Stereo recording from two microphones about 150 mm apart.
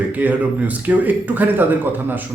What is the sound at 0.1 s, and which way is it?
Speech, 10° right (ahead or behind).